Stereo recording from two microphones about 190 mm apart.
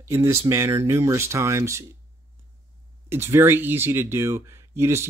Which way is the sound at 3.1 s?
10° right (ahead or behind).